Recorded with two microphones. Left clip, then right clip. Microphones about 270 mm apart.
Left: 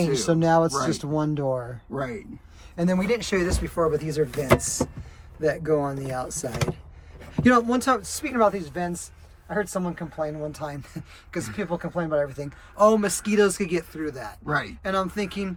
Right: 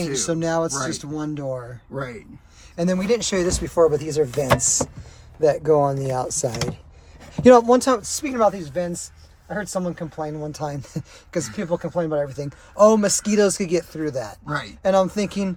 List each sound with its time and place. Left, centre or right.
0.1 s speech: centre
4.5 s speech: centre
5.4 s speech: centre